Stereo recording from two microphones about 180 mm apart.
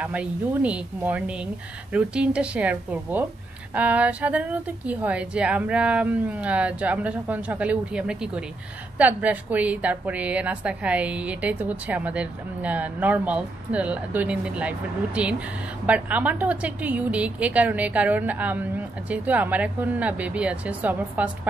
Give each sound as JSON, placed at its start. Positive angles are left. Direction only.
{"t": 0.0, "sound": "a woman's voice", "side_deg": -5}